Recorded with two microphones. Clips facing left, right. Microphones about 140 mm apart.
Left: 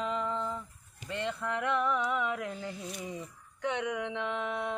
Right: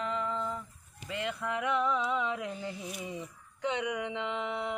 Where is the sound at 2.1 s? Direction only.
20° right (ahead or behind).